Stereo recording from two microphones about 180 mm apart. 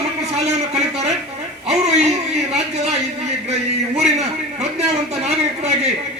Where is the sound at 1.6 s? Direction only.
35° right (ahead or behind).